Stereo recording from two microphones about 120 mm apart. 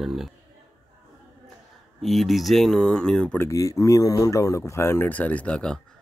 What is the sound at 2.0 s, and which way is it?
Speech, centre (ahead or behind).